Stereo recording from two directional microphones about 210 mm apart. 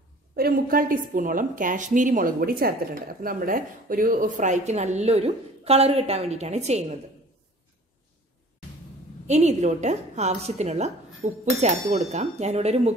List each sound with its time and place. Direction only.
0.4 s a woman's voice: 45° right (ahead or behind)
9.3 s a woman's voice: 35° right (ahead or behind)